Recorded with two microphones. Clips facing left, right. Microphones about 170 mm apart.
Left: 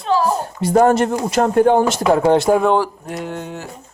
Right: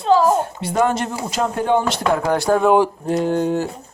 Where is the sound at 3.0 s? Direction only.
30° right (ahead or behind).